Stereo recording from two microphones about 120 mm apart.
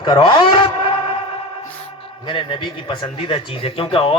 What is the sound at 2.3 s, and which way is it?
A man's voice, 45° left (ahead or behind).